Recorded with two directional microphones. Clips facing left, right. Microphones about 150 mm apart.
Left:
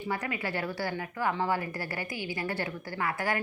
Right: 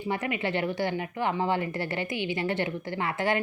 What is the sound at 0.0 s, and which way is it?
A woman's voice, 20° right (ahead or behind).